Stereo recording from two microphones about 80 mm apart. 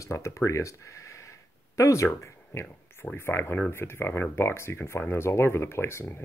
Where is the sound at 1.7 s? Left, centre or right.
Left.